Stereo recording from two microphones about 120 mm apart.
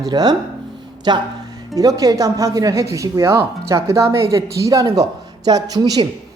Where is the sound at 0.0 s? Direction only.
35° right (ahead or behind).